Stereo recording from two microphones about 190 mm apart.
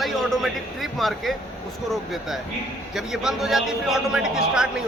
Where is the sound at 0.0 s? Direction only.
Centre (ahead or behind).